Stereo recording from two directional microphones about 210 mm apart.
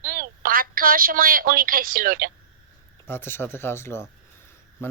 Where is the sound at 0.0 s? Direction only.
40° right (ahead or behind).